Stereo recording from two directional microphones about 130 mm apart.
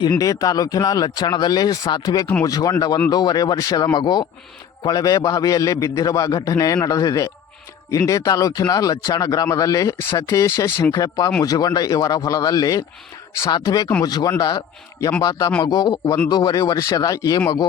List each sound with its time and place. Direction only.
0.2 s speech: 25° left (ahead or behind)